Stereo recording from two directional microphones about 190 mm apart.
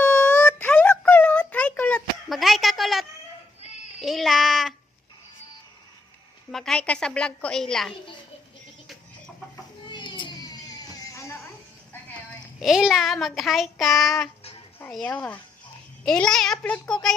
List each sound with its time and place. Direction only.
0.0 s a sound: 5° left (ahead or behind)
4.0 s child singing: centre (ahead or behind)
6.5 s child singing: centre (ahead or behind)
9.9 s a sound: 25° left (ahead or behind)
12.5 s child singing: centre (ahead or behind)
14.8 s speech: 5° left (ahead or behind)
16.0 s child singing: 5° left (ahead or behind)